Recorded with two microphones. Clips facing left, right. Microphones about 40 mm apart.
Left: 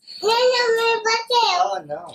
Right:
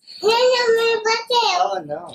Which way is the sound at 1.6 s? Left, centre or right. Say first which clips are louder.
Right 1 dB; centre.